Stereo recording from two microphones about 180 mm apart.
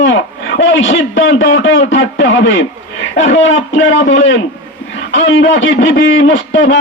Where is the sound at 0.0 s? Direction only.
90° left.